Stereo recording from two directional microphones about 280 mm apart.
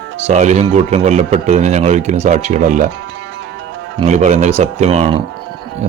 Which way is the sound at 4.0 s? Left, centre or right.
Right.